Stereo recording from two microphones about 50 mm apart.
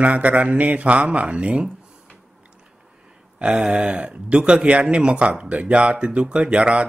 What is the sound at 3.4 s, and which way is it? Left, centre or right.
Speech, right.